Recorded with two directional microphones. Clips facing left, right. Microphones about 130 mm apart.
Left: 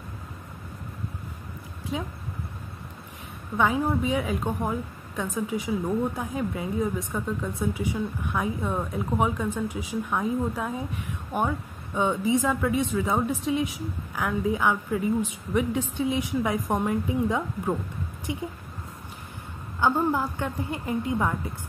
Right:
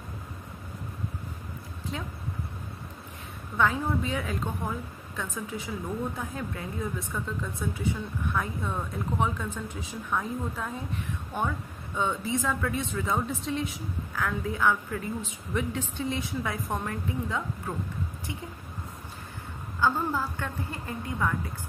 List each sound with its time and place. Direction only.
1.9 s speech: 10° left (ahead or behind)
3.5 s speech: 15° left (ahead or behind)
19.8 s speech: 20° left (ahead or behind)